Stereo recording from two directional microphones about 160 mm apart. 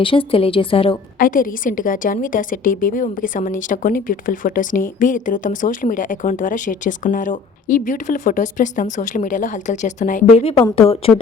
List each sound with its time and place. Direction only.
0.0 s a woman's voice: 35° left (ahead or behind)
1.2 s a woman's voice: 60° left (ahead or behind)
10.8 s a woman's voice: 35° left (ahead or behind)